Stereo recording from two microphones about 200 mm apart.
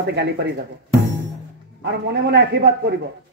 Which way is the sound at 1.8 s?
55° right (ahead or behind).